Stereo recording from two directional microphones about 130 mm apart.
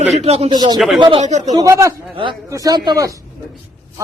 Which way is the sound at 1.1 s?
65° right (ahead or behind).